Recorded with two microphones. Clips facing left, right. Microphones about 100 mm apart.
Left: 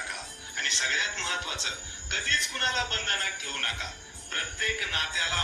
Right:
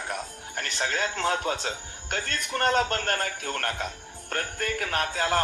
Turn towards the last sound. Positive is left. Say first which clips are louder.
# right 8 dB
turn(degrees=-50)  # may be behind; listen again after turning